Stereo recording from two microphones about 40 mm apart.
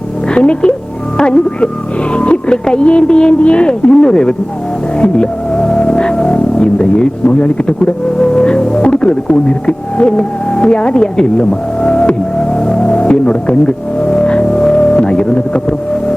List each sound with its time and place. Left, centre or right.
0.3 s speech: left
5.1 s music: left
6.3 s speech: left
8.2 s music: left
8.8 s speech: left